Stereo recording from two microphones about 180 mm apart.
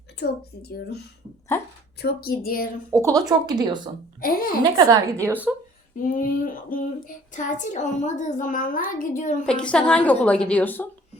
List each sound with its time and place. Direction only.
0.2 s speech: 60° left (ahead or behind)
2.0 s speech: 55° left (ahead or behind)
2.9 s a woman's voice: 15° right (ahead or behind)
4.2 s speech: 55° left (ahead or behind)
5.2 s a woman's voice: 10° right (ahead or behind)
6.0 s speech: 50° left (ahead or behind)
9.5 s a woman's voice: 5° left (ahead or behind)